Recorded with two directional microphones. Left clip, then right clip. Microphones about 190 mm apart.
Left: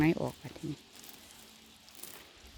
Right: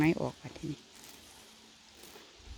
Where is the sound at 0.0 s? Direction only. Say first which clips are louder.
Even; 5° right (ahead or behind).